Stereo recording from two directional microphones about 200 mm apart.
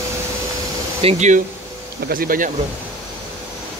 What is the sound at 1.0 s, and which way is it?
Speech, 35° right (ahead or behind).